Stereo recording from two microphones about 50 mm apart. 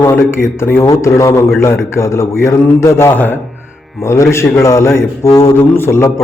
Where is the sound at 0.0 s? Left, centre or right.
Left.